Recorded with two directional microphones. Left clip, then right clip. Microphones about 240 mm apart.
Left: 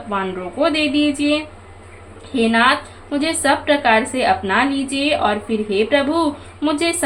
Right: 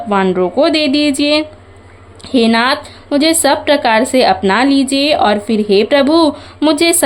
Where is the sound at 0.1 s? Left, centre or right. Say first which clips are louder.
Right 10 dB; right.